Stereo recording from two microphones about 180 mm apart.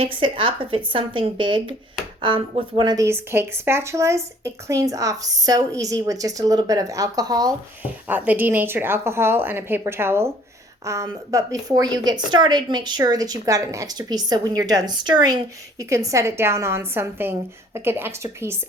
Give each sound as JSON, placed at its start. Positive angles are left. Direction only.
{"t": 0.0, "sound": "a woman's voice", "side_deg": -30}
{"t": 7.8, "sound": "a woman's voice", "side_deg": -10}